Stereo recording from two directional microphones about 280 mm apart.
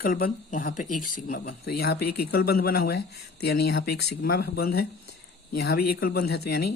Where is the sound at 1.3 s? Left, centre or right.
Left.